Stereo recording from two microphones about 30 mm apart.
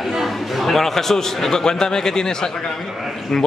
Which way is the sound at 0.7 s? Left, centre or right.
Centre.